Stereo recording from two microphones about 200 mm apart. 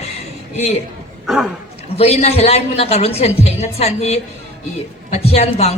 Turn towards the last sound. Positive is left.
turn(degrees=30)  # may be behind; listen again after turning